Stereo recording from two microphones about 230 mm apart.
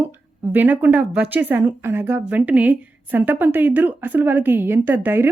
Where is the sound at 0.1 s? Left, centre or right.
Centre.